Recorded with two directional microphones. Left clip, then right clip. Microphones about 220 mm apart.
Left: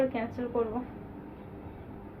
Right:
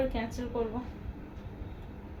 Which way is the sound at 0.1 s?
25° right (ahead or behind).